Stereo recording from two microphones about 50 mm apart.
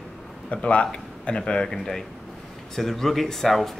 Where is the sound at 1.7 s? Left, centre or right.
Centre.